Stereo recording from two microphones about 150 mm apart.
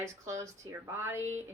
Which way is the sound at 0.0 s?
20° right (ahead or behind).